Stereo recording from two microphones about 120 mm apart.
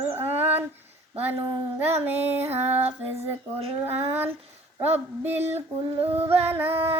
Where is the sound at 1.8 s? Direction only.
20° right (ahead or behind).